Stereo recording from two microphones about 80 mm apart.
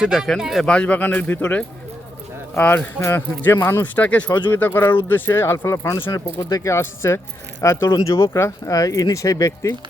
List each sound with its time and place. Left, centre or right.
0.0 s speech: centre
0.6 s speech: centre; by 9.7 s left